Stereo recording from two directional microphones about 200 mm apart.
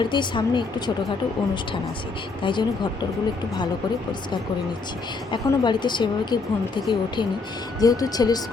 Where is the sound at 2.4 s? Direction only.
25° left (ahead or behind).